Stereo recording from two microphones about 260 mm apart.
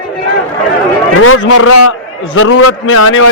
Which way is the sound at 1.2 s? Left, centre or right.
Left.